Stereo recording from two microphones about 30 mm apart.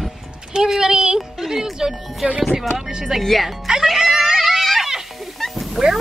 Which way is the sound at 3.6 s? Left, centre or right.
Centre.